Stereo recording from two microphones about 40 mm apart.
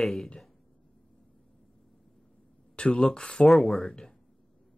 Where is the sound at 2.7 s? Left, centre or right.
Left.